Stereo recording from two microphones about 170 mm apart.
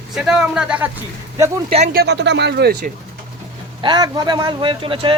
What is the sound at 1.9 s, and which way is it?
Speech, 70° right (ahead or behind).